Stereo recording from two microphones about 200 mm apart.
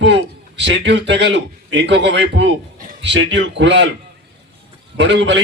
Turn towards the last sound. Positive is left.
turn(degrees=-60)  # may be behind; listen again after turning